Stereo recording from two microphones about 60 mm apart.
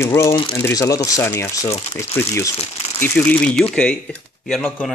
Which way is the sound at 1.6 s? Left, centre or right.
Left.